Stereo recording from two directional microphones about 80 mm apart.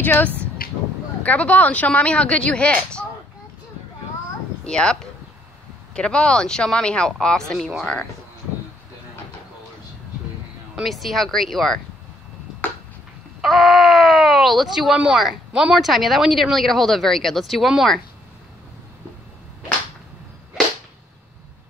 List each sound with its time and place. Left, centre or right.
0.0 s speech: left
4.6 s speech: centre
5.9 s speech: centre
10.8 s speech: centre
13.4 s speech: centre
20.6 s a sound: centre